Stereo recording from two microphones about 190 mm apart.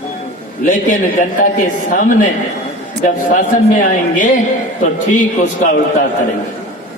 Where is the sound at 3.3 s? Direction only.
45° left (ahead or behind).